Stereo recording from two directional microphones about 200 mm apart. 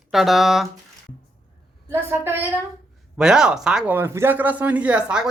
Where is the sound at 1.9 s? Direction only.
10° right (ahead or behind).